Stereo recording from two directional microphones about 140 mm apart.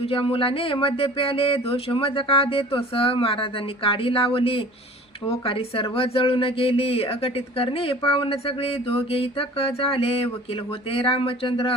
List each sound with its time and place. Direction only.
0.0 s speech: 40° left (ahead or behind)